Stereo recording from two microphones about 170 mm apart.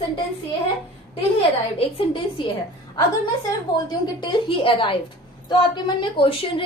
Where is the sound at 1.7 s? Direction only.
30° left (ahead or behind).